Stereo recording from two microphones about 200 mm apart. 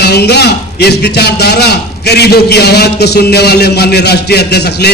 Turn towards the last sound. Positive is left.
turn(degrees=55)  # may be behind; listen again after turning